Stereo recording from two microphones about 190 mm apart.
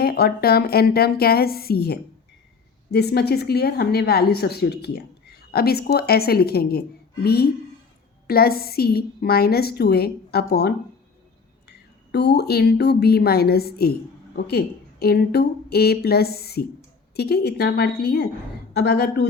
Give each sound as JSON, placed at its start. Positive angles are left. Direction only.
{"t": 0.0, "sound": "a woman's voice", "side_deg": 55}
{"t": 8.3, "sound": "a woman's voice", "side_deg": 50}
{"t": 12.1, "sound": "a woman's voice", "side_deg": 60}